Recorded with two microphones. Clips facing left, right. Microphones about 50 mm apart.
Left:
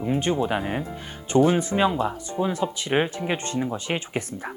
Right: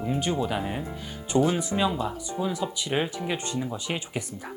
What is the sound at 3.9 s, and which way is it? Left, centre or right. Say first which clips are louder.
Speech: left 3 dB; left.